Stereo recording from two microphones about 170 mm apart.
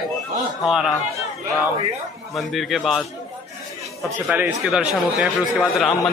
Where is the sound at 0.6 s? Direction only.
5° right (ahead or behind).